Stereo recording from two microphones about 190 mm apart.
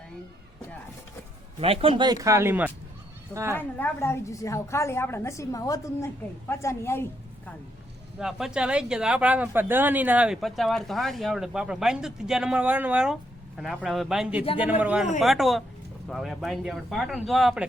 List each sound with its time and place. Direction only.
1.6 s speech: 30° right (ahead or behind); by 2.7 s 10° right (ahead or behind)
3.5 s a woman's voice: 10° left (ahead or behind)
8.2 s speech: 5° right (ahead or behind)